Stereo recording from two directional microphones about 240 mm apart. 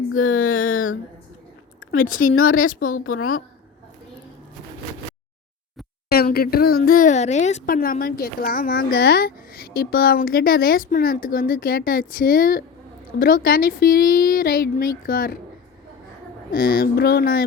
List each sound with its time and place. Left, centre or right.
0.3 s a sound: left
2.0 s a woman's voice: left
2.3 s a woman's voice: left
6.1 s a woman's voice: left
16.5 s a woman's voice: left